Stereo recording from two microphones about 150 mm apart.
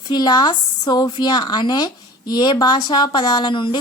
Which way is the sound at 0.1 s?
25° left (ahead or behind).